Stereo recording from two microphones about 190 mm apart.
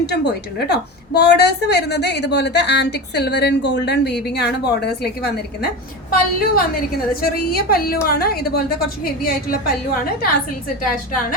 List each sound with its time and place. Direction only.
0.0 s a woman's voice: 60° left (ahead or behind)